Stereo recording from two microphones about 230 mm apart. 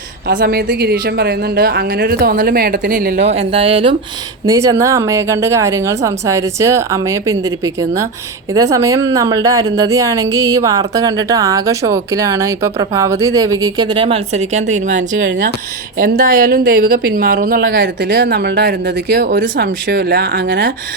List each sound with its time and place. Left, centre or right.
0.3 s a woman's voice: right
3.2 s speech: right
4.4 s speech: centre; by 15.0 s right
15.3 s a woman's voice: right